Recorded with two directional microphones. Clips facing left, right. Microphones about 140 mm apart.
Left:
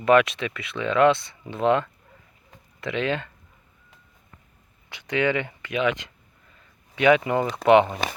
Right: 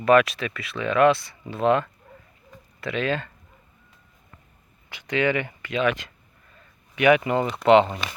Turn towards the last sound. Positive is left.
turn(degrees=15)  # may be behind; listen again after turning